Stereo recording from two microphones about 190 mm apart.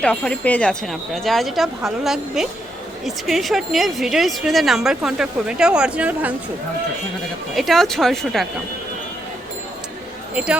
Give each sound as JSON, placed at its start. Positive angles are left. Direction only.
{"t": 0.0, "sound": "speech", "side_deg": 5}
{"t": 7.5, "sound": "speech", "side_deg": 0}
{"t": 10.3, "sound": "speech", "side_deg": -5}